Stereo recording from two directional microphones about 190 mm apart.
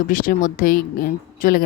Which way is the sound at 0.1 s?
45° left (ahead or behind).